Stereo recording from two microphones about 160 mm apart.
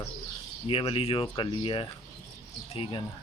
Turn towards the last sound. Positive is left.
turn(degrees=30)  # may be behind; listen again after turning